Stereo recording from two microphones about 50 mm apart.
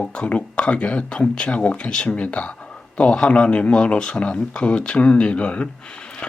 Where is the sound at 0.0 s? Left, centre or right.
Left.